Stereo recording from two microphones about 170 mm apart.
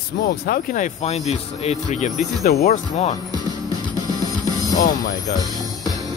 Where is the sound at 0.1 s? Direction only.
65° left (ahead or behind).